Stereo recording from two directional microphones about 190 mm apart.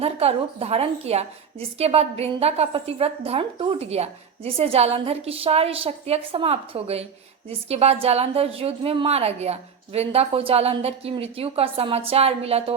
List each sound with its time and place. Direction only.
0.0 s a woman's voice: 30° right (ahead or behind)